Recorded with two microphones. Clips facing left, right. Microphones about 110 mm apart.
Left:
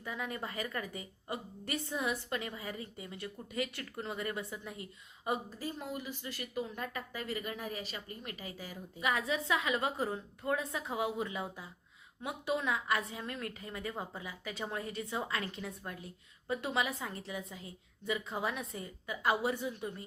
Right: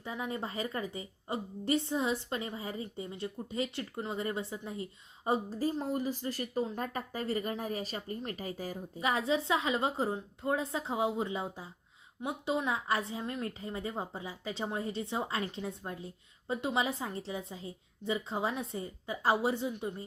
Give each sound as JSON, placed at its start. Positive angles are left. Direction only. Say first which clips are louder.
{"t": 0.0, "sound": "a woman's voice", "louder": "right 3 dB", "side_deg": -25}